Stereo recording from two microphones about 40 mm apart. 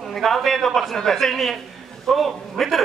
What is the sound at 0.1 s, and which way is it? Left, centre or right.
A woman's voice, centre.